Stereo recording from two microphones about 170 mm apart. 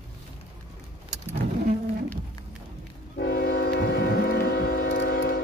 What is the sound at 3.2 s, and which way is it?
Train, 65° left (ahead or behind).